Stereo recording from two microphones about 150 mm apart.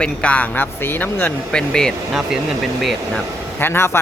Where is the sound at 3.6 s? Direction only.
15° left (ahead or behind).